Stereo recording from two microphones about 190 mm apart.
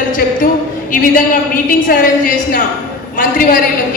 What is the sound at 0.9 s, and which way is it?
A woman's voice, 50° left (ahead or behind).